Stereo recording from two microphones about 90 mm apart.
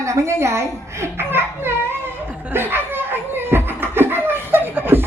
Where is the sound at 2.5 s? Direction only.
25° right (ahead or behind).